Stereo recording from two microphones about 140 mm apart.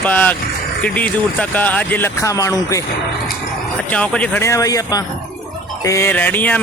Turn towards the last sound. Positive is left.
turn(degrees=10)  # may be behind; listen again after turning